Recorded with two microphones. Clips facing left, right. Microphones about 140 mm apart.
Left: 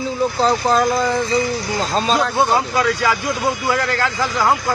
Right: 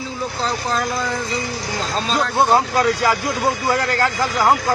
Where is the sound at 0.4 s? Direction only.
35° left (ahead or behind).